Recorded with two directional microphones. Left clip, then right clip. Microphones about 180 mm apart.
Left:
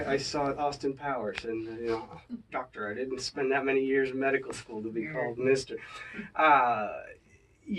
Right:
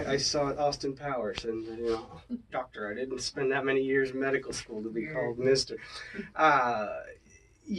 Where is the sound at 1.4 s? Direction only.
25° left (ahead or behind).